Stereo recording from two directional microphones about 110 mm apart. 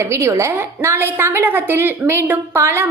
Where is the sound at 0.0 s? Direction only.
25° right (ahead or behind).